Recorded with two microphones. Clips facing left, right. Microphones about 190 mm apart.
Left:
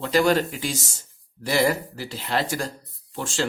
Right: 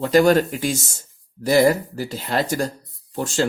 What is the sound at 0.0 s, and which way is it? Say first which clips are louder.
Speech: right 5 dB; 45° right (ahead or behind).